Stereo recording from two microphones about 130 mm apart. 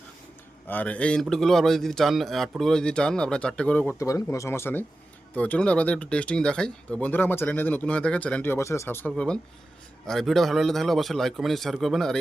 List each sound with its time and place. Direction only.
0.7 s a man's voice: 10° left (ahead or behind)
3.9 s a man's voice: 25° left (ahead or behind); by 12.1 s centre (ahead or behind)